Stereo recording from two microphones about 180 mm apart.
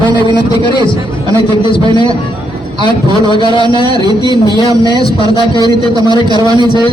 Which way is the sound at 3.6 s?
25° right (ahead or behind).